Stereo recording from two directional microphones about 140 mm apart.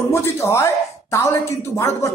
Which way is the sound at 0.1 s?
20° left (ahead or behind).